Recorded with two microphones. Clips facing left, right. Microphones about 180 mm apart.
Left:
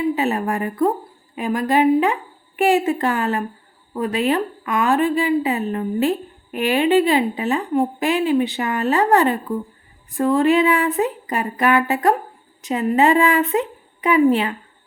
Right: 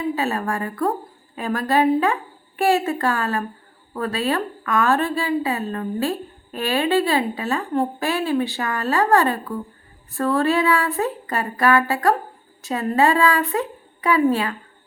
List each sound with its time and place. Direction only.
0.0 s a woman's voice: 20° left (ahead or behind)